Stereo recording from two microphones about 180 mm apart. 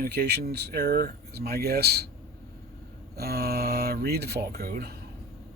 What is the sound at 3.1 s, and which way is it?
Speech, 60° right (ahead or behind).